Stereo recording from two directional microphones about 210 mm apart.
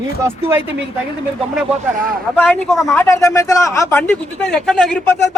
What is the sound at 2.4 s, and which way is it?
A man's voice, 5° left (ahead or behind).